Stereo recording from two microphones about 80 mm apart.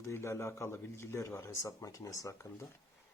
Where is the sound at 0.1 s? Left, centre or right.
Left.